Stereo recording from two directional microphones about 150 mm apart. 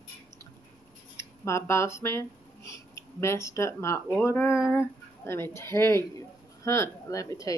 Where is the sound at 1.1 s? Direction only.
20° left (ahead or behind).